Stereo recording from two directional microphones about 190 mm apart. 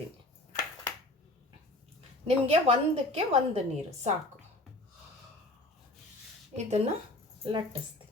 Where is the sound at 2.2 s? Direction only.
30° right (ahead or behind).